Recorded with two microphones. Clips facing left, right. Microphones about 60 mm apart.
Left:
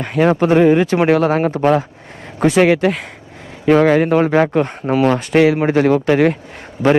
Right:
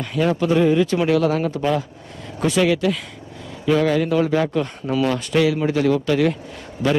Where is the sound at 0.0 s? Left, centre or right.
Left.